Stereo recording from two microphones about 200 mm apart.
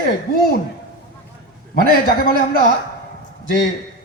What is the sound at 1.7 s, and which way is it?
A man's voice, 50° left (ahead or behind).